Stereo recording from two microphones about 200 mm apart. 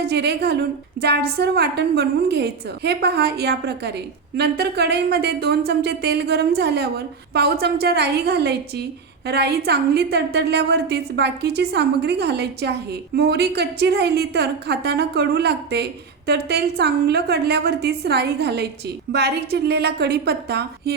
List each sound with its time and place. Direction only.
0.0 s a woman's voice: 55° right (ahead or behind)